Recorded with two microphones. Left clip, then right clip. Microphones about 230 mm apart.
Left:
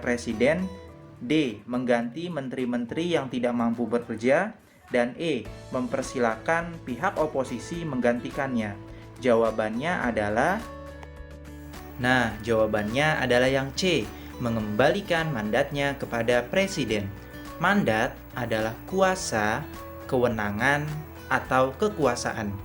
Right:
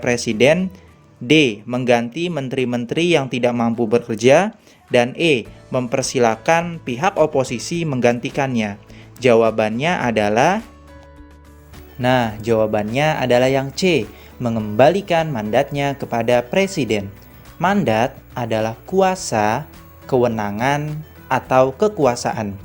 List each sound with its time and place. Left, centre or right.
0.0 s speech: right
12.0 s speech: right